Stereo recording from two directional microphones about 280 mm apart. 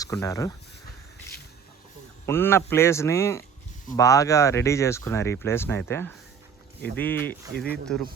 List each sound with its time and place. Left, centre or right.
0.0 s speech: centre
2.2 s speech: centre